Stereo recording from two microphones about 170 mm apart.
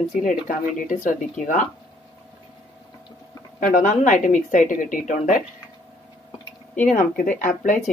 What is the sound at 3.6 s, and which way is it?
Speech, 50° left (ahead or behind).